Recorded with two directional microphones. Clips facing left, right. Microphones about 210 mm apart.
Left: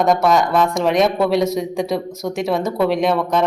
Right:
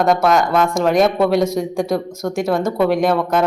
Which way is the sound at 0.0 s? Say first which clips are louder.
Even; centre (ahead or behind).